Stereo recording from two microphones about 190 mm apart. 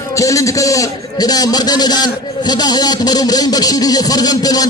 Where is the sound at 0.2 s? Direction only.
15° left (ahead or behind).